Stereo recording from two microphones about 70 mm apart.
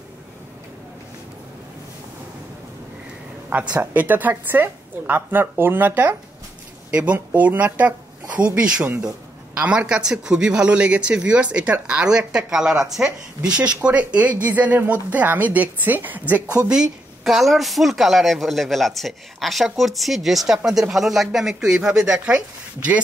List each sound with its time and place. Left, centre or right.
3.4 s speech: right
6.9 s speech: centre
9.6 s a man's voice: centre
16.6 s speech: centre